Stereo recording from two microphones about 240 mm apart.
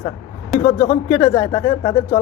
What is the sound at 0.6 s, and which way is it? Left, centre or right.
A man's voice, left.